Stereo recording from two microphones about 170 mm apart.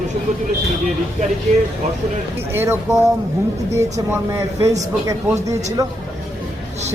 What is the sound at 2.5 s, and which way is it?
Speech, 15° right (ahead or behind).